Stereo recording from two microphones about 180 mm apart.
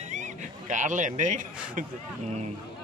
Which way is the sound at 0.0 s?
40° right (ahead or behind).